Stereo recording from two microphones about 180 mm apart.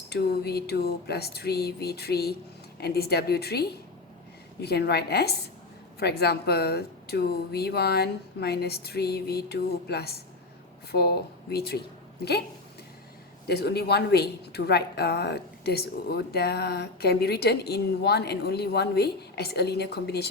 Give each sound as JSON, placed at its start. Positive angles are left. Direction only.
{"t": 0.1, "sound": "a woman's voice", "side_deg": 60}
{"t": 13.5, "sound": "a woman's voice", "side_deg": 65}